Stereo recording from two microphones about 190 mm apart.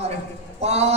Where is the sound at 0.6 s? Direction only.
35° right (ahead or behind).